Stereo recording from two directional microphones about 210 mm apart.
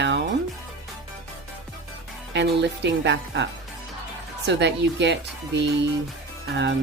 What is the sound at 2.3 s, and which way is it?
Speech, 55° right (ahead or behind).